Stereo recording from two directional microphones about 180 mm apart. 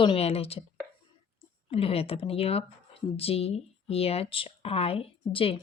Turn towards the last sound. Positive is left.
turn(degrees=30)  # may be behind; listen again after turning